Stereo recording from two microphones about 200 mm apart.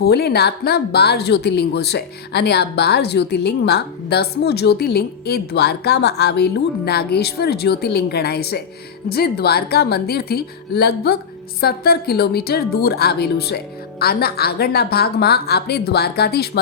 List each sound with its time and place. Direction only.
0.0 s speech: 50° left (ahead or behind)